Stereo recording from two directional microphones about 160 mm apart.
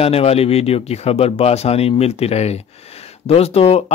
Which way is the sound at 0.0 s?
40° left (ahead or behind).